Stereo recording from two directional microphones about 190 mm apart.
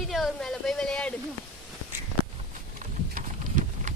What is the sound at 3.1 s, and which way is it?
Clip-clop, 40° right (ahead or behind).